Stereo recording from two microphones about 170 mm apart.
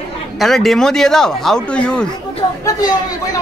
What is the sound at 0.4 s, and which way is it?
Speech, centre (ahead or behind).